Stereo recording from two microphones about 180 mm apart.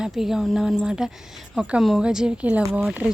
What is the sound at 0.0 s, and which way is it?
A woman's voice, 5° right (ahead or behind).